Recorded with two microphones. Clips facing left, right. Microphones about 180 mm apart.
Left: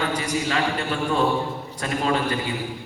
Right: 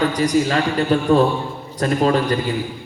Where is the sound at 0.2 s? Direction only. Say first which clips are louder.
Right 7 dB; 40° right (ahead or behind).